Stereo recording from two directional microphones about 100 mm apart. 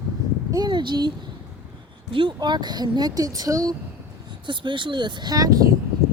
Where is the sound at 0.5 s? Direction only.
45° right (ahead or behind).